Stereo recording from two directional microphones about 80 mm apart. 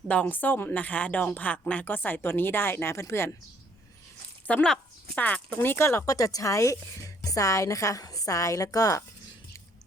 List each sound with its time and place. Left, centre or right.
0.1 s a woman's voice: centre
4.4 s speech: centre
5.5 s a woman's voice: left
6.1 s a woman's voice: left